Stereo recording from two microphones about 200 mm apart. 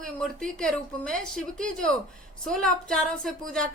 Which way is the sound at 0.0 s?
5° left (ahead or behind).